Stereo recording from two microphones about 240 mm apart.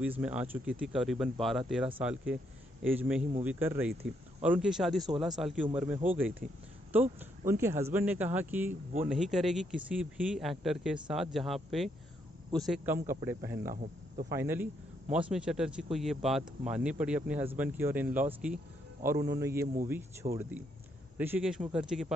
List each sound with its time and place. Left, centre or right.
0.0 s speech: centre
13.6 s cricket: right
14.3 s speech: centre